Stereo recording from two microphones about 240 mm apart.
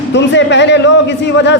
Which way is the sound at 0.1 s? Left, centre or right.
Left.